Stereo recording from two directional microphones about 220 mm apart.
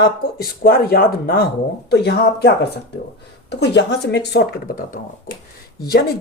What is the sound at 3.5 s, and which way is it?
Speech, 50° left (ahead or behind).